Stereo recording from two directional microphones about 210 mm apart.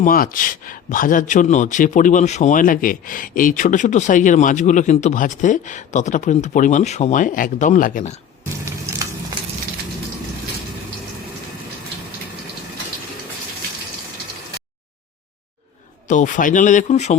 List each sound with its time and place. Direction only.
0.0 s a man's voice: 40° left (ahead or behind)
16.0 s a man's voice: 35° left (ahead or behind)